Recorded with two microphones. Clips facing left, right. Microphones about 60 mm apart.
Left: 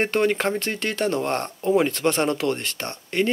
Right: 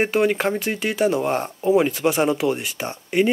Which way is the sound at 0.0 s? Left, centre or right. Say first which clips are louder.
Right 2 dB; centre.